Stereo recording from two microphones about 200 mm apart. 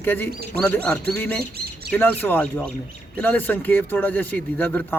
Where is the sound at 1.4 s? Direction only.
50° right (ahead or behind).